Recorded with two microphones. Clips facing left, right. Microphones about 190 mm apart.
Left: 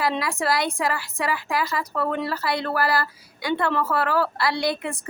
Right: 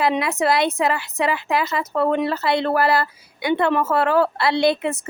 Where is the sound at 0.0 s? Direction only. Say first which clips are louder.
Right 5 dB; 20° right (ahead or behind).